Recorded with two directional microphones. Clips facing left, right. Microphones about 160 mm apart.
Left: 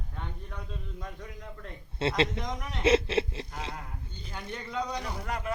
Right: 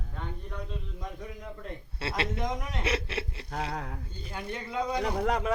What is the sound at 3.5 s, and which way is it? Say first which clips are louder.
Speech: right 9 dB; 90° right.